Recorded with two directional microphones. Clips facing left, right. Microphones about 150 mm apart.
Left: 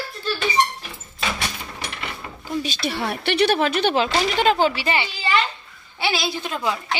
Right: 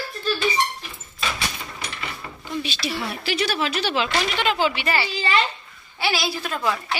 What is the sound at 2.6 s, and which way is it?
A woman's voice, 50° left (ahead or behind).